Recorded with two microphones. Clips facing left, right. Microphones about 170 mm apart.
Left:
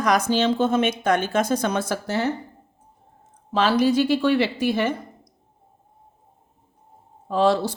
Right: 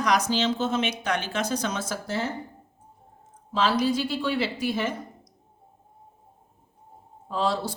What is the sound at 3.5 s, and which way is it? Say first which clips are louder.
A woman's voice: left 5 dB; 65° left (ahead or behind).